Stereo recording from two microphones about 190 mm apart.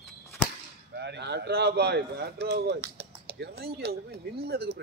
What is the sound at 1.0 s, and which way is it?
Speech, 65° right (ahead or behind).